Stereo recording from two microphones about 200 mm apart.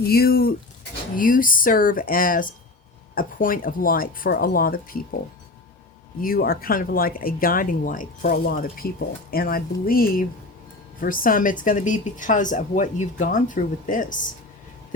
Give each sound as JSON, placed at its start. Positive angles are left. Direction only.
{"t": 0.0, "sound": "speech", "side_deg": 50}
{"t": 6.2, "sound": "speech", "side_deg": 45}